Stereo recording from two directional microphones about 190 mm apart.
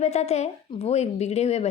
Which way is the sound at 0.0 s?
35° left (ahead or behind).